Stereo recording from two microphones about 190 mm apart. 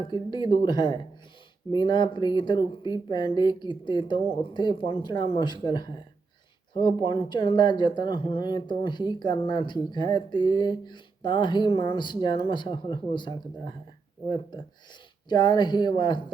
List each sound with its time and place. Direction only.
0.0 s speech: 25° left (ahead or behind)